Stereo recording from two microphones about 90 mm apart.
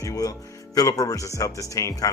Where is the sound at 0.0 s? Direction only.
40° left (ahead or behind).